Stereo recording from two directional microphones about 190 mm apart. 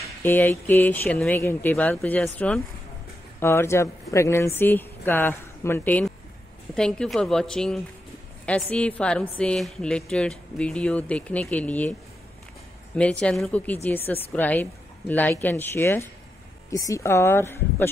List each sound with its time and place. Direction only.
0.0 s a woman's voice: 10° left (ahead or behind)
12.9 s a woman's voice: 5° left (ahead or behind)